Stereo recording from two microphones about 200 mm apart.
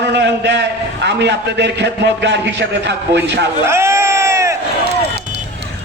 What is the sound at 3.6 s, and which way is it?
Crowd, 15° right (ahead or behind).